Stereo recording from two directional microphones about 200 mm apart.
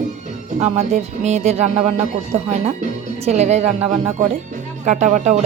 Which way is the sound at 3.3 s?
35° right (ahead or behind).